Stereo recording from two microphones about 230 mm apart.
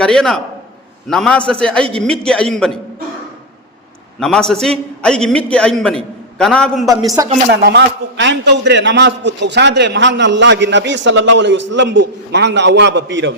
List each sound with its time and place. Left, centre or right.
0.0 s a man's voice: centre
4.2 s a man's voice: centre
7.2 s speech: centre
7.5 s a man's voice: right